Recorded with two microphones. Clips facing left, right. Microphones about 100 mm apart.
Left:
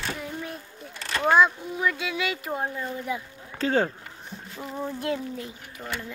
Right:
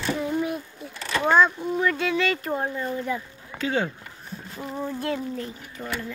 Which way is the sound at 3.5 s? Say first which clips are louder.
Left 2 dB; 40° left (ahead or behind).